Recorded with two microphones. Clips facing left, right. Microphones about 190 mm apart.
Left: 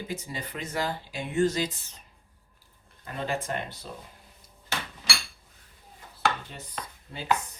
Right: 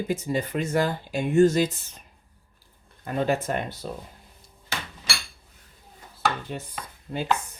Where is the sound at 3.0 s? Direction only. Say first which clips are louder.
Right 7 dB; 50° right (ahead or behind).